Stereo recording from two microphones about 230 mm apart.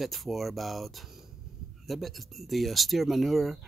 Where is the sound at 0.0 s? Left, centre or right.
Centre.